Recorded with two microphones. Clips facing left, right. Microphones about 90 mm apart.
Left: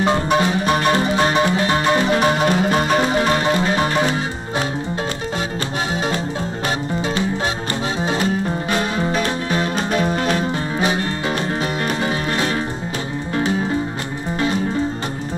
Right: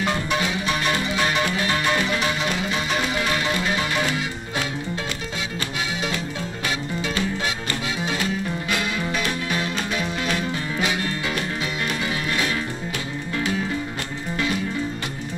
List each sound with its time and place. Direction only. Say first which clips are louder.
0.0 s music: left 7 dB; 35° left (ahead or behind)
8.0 s music: left 7 dB; 35° left (ahead or behind)